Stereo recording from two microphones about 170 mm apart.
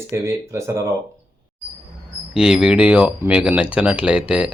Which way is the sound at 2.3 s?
5° right (ahead or behind).